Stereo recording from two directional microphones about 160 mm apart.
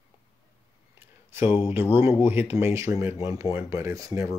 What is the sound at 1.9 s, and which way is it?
Speech, 15° right (ahead or behind).